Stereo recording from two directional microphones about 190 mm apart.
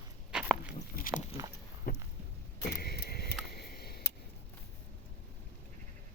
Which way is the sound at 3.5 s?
55° left (ahead or behind).